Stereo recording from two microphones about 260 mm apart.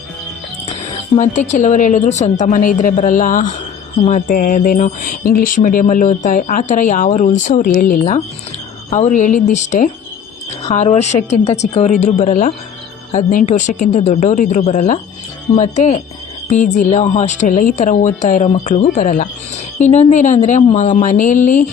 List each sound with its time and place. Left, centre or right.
0.7 s speech: left